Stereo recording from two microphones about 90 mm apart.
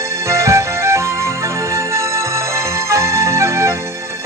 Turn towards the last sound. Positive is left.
turn(degrees=-30)  # may be behind; listen again after turning